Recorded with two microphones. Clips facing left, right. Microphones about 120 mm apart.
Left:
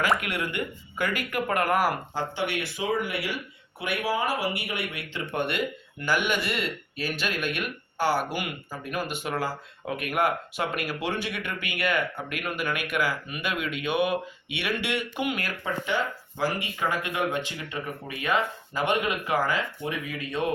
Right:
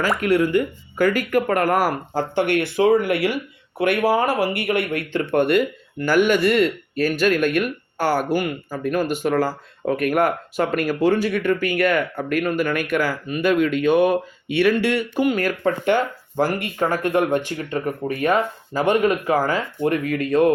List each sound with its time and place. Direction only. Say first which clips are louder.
0.2 s speech: right 13 dB; 35° right (ahead or behind)